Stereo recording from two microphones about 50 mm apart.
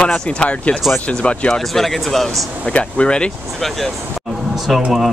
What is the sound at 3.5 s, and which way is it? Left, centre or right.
Speech, centre.